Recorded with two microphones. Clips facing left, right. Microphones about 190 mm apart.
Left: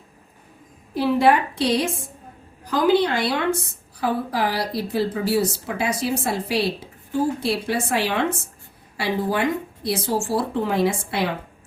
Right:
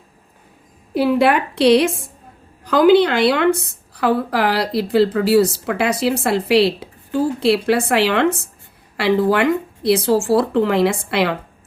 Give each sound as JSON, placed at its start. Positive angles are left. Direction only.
{"t": 0.9, "sound": "a woman's voice", "side_deg": -70}